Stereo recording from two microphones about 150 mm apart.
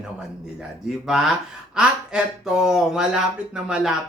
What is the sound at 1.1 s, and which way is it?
Speech, 5° right (ahead or behind).